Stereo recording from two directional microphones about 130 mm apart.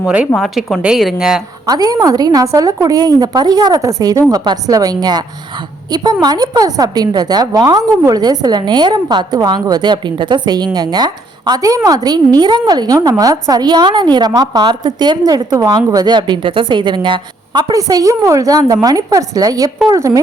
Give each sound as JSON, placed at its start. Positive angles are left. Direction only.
{"t": 0.0, "sound": "a woman's voice", "side_deg": -10}
{"t": 0.3, "sound": "a woman's voice", "side_deg": 0}
{"t": 1.6, "sound": "a woman's voice", "side_deg": -30}